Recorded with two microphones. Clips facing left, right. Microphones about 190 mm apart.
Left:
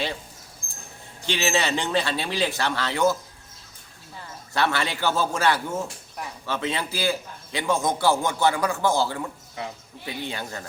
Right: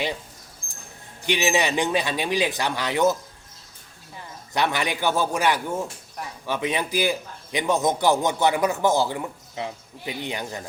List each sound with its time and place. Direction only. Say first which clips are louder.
1.2 s a man's voice: right 2 dB; 15° right (ahead or behind)
4.5 s a man's voice: right 1 dB; 15° right (ahead or behind)